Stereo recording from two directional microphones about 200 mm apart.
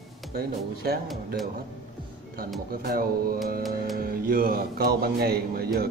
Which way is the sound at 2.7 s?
50° right (ahead or behind).